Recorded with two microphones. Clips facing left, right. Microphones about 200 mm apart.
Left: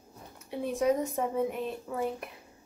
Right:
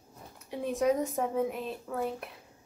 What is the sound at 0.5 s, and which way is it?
Speech, centre (ahead or behind).